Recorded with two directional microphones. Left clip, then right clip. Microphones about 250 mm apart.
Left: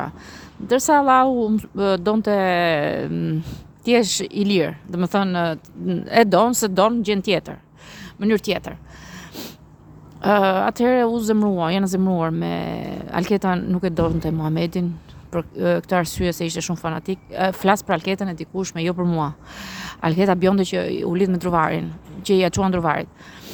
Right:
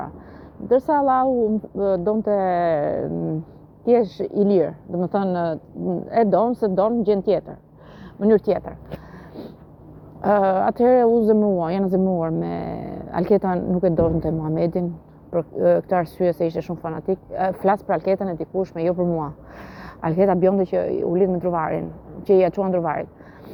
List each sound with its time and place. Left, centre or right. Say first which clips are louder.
0.7 s speech: left 1 dB; left
0.9 s a woman's voice: left 3 dB; left
1.8 s speech: left 1 dB; left
4.9 s a woman's voice: even; left
6.1 s speech: left 3 dB; left
6.7 s a woman's voice: left 1 dB; left
10.2 s speech: left 1 dB; left